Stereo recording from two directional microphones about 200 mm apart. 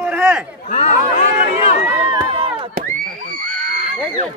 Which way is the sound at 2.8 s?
40° right (ahead or behind).